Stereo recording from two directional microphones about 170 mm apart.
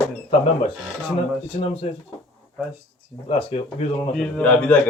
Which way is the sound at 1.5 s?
35° left (ahead or behind).